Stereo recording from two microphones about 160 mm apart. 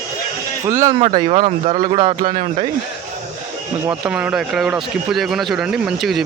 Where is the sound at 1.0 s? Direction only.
35° right (ahead or behind).